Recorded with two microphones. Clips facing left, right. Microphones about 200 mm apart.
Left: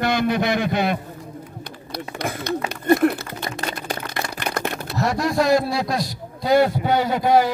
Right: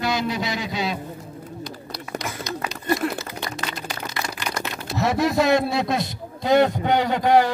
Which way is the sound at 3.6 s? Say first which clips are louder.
Left 3 dB; 35° left (ahead or behind).